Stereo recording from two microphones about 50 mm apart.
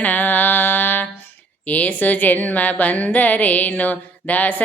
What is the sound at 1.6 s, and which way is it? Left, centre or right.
A woman's voice, left.